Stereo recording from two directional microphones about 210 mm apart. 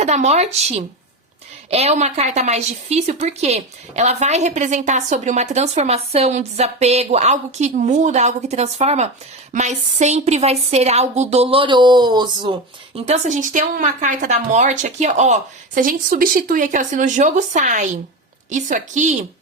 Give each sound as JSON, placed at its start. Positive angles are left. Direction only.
{"t": 0.0, "sound": "a woman's voice", "side_deg": -30}
{"t": 13.1, "sound": "a woman's voice", "side_deg": -35}